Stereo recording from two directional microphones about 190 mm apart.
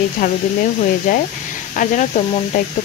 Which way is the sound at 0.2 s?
45° left (ahead or behind).